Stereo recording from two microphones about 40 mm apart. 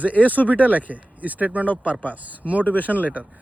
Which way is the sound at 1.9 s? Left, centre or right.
Left.